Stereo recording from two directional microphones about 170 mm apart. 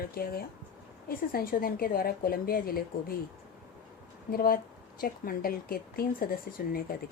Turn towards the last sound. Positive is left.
turn(degrees=60)  # may be behind; listen again after turning